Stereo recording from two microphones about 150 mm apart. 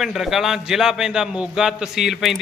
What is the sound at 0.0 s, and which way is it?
A man's voice, centre (ahead or behind).